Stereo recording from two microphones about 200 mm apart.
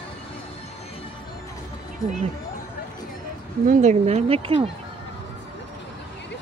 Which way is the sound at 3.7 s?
35° right (ahead or behind).